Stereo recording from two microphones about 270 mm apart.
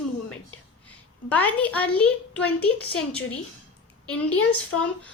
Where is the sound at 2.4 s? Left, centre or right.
Left.